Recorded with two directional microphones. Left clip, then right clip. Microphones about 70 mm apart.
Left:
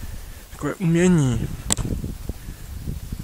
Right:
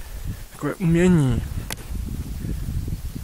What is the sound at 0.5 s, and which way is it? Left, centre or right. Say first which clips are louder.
Speech: even; centre.